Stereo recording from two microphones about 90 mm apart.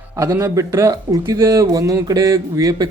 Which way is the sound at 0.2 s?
35° right (ahead or behind).